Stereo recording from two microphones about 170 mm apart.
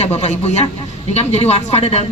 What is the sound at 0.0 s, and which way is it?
Speech, 40° left (ahead or behind).